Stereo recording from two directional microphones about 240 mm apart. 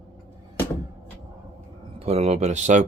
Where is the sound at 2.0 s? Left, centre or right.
Right.